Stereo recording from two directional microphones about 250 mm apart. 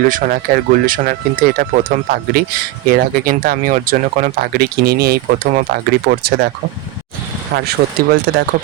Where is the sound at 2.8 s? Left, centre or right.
Right.